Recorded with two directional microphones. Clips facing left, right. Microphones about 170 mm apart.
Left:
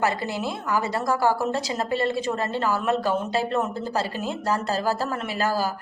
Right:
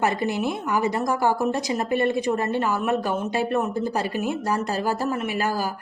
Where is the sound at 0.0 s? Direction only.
20° right (ahead or behind).